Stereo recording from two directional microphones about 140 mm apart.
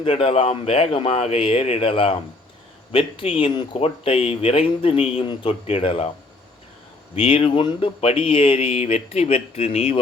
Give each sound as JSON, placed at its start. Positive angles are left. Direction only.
{"t": 0.0, "sound": "speech", "side_deg": 45}
{"t": 7.2, "sound": "speech", "side_deg": 40}